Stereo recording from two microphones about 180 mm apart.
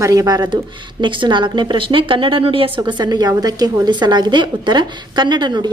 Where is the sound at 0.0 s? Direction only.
20° right (ahead or behind).